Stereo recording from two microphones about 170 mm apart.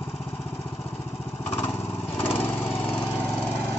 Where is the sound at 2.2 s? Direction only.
10° left (ahead or behind).